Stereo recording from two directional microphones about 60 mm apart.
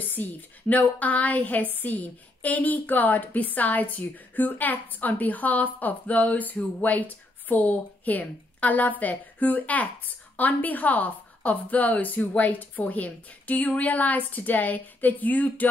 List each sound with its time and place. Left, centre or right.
0.0 s a woman's voice: left